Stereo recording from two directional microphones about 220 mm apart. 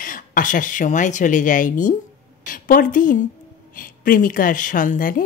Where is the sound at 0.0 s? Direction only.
40° left (ahead or behind).